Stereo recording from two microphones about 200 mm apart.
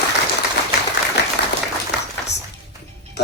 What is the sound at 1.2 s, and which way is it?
Applause, 60° left (ahead or behind).